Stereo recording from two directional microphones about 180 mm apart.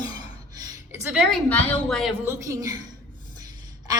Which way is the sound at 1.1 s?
5° right (ahead or behind).